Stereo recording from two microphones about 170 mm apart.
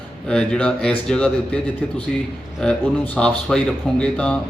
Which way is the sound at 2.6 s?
5° left (ahead or behind).